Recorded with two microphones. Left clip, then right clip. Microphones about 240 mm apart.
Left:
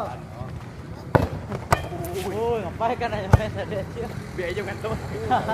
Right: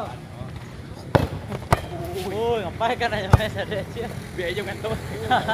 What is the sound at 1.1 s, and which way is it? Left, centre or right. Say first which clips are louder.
Basketball bounce: even; centre.